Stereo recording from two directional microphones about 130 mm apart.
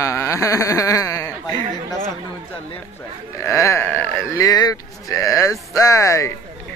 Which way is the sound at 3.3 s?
25° left (ahead or behind).